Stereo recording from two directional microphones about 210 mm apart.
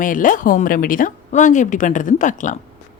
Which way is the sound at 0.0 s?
40° left (ahead or behind).